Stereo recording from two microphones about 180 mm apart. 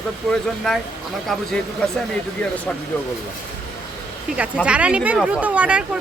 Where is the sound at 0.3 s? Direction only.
Centre (ahead or behind).